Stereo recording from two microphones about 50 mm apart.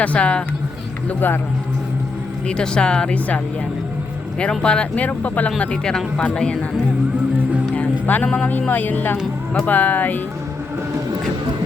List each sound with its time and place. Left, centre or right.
0.0 s speech: left
2.5 s speech: centre
4.4 s speech: left
5.5 s speech: centre
7.8 s music: left
8.7 s speech: left